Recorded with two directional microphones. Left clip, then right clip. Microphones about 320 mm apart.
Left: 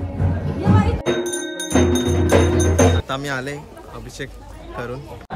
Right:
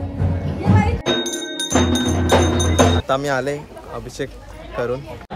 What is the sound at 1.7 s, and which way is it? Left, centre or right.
Music, right.